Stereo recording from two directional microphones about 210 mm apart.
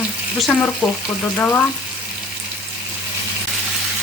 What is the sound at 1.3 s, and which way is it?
Frying, 10° left (ahead or behind).